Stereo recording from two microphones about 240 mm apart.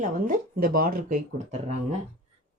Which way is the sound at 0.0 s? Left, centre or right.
Right.